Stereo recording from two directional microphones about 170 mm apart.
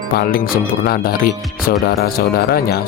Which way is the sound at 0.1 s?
60° left (ahead or behind).